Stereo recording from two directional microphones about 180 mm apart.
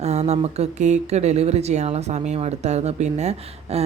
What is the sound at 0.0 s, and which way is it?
Speech, 40° right (ahead or behind).